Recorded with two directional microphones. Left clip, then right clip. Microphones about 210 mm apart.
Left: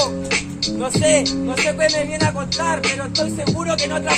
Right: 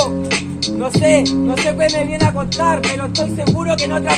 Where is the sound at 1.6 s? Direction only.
15° left (ahead or behind).